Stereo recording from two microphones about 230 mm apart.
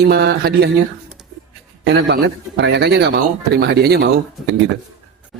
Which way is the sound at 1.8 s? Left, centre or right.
Right.